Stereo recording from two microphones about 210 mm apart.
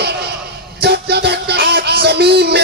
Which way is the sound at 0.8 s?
50° right (ahead or behind).